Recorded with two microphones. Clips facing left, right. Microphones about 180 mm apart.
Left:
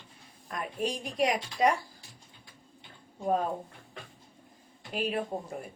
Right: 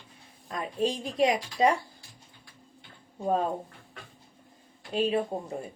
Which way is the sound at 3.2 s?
30° right (ahead or behind).